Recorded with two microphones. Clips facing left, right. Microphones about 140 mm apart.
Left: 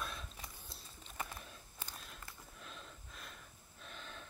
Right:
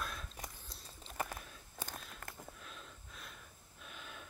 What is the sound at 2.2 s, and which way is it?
Sniff, 50° right (ahead or behind).